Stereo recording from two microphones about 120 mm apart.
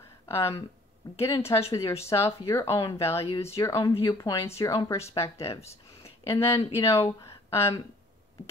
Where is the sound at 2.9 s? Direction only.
20° left (ahead or behind).